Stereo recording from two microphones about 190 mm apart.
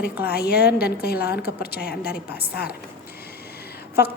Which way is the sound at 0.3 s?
55° left (ahead or behind).